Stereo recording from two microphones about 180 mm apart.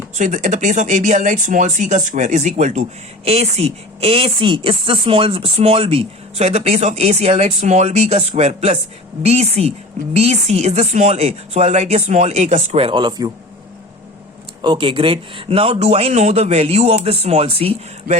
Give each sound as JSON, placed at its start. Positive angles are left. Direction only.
{"t": 0.2, "sound": "speech", "side_deg": -45}
{"t": 14.6, "sound": "speech", "side_deg": -25}